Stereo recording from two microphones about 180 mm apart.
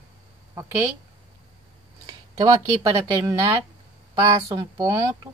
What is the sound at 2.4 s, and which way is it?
Speech, 20° right (ahead or behind).